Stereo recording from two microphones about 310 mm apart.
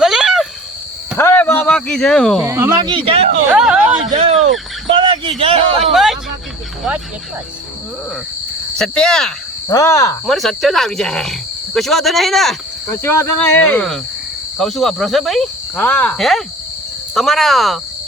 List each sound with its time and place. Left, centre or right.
0.0 s a sound: centre
1.1 s speech: centre
2.5 s speech: centre
3.5 s speech: centre
4.0 s speech: right
5.4 s speech: centre
5.8 s speech: centre
8.8 s speech: centre